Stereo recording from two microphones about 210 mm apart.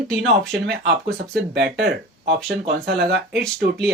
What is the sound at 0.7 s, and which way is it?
Speech, 50° right (ahead or behind).